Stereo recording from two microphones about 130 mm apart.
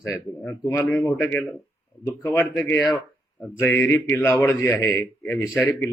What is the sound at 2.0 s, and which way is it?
A man's voice, 20° left (ahead or behind).